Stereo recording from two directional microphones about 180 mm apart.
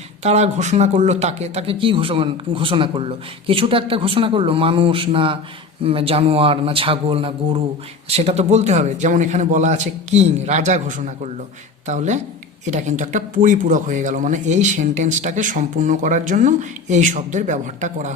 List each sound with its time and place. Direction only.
0.2 s a man's voice: 35° right (ahead or behind)